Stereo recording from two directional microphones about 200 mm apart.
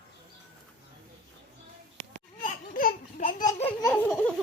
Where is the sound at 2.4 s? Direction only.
40° left (ahead or behind).